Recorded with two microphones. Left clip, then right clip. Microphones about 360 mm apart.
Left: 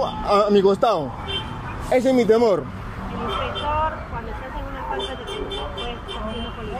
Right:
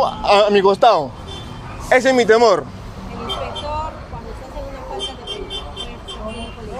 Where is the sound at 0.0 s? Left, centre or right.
Right.